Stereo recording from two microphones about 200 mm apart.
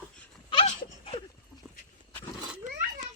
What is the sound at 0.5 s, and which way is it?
Dog, 30° left (ahead or behind).